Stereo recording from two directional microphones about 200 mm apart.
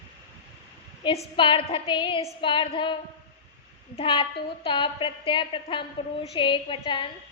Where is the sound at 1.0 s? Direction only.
25° left (ahead or behind).